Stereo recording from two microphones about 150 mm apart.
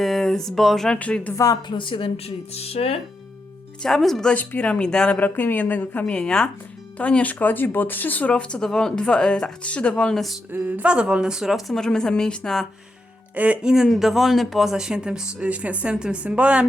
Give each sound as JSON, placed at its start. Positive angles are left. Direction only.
{"t": 0.0, "sound": "speech", "side_deg": 0}
{"t": 1.4, "sound": "a woman's voice", "side_deg": 25}
{"t": 3.8, "sound": "speech", "side_deg": 0}
{"t": 10.5, "sound": "speech", "side_deg": -10}
{"t": 13.3, "sound": "speech", "side_deg": -10}